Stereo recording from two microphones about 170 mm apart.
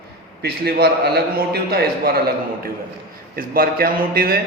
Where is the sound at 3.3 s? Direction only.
60° right (ahead or behind).